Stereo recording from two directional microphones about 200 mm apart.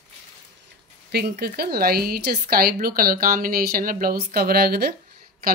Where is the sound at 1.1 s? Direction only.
50° right (ahead or behind).